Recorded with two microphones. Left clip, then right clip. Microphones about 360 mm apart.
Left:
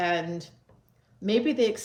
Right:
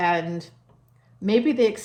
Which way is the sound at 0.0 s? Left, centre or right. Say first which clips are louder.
Right 4 dB; right.